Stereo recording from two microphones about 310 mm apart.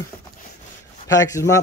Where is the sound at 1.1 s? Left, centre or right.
Centre.